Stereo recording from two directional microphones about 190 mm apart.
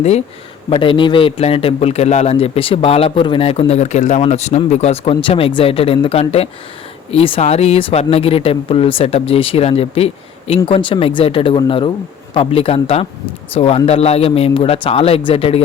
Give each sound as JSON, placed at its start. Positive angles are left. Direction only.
{"t": 0.7, "sound": "a man's voice", "side_deg": 25}